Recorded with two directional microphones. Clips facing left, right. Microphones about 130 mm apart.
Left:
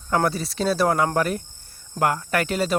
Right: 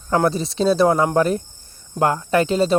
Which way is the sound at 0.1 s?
25° right (ahead or behind).